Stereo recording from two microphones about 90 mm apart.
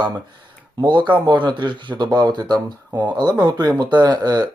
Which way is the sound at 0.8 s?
60° right (ahead or behind).